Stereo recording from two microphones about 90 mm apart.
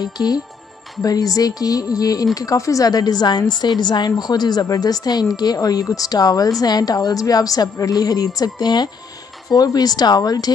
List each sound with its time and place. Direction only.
0.0 s a woman's voice: 50° left (ahead or behind)